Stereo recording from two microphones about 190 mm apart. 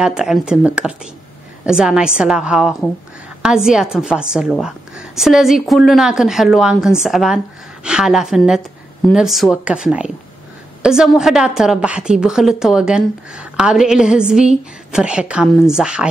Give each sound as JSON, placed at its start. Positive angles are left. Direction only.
{"t": 0.0, "sound": "a woman's voice", "side_deg": -5}